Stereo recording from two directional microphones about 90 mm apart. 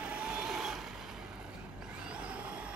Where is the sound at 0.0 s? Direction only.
10° right (ahead or behind).